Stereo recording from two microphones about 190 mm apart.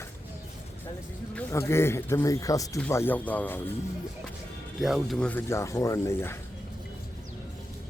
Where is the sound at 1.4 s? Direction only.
15° left (ahead or behind).